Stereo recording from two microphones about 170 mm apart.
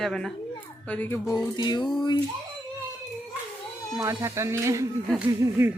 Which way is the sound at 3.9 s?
15° right (ahead or behind).